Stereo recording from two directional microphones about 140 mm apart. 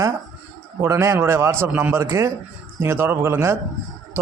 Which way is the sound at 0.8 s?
20° right (ahead or behind).